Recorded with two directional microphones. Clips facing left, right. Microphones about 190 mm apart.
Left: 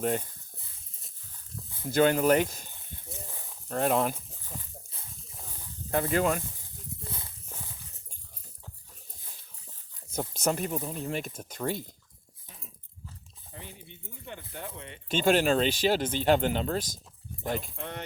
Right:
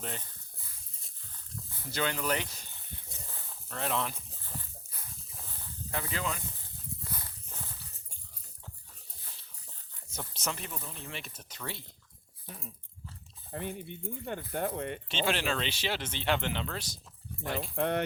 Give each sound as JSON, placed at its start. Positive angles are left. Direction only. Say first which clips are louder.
{"t": 0.0, "sound": "speech", "louder": "left 12 dB", "side_deg": 50}
{"t": 1.9, "sound": "speech", "louder": "left 10 dB", "side_deg": 50}
{"t": 3.7, "sound": "speech", "louder": "left 8 dB", "side_deg": 45}
{"t": 5.9, "sound": "speech", "louder": "left 10 dB", "side_deg": 50}
{"t": 7.1, "sound": "a sound", "louder": "left 2 dB", "side_deg": 20}
{"t": 10.2, "sound": "speech", "louder": "left 9 dB", "side_deg": 45}
{"t": 13.5, "sound": "speech", "louder": "right 9 dB", "side_deg": -55}
{"t": 15.1, "sound": "speech", "louder": "left 9 dB", "side_deg": 45}
{"t": 17.7, "sound": "speech", "louder": "right 9 dB", "side_deg": -60}